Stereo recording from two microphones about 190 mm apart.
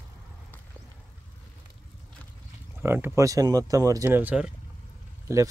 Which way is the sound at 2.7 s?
10° right (ahead or behind).